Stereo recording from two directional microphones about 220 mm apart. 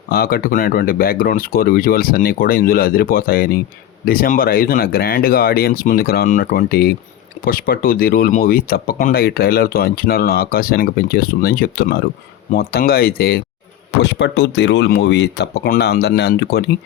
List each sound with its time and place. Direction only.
0.1 s speech: 45° left (ahead or behind)